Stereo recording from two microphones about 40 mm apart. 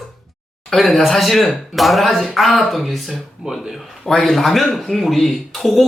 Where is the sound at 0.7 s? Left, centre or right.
Centre.